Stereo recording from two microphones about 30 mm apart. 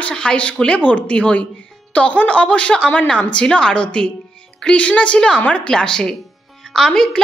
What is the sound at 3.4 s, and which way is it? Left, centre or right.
Speech, left.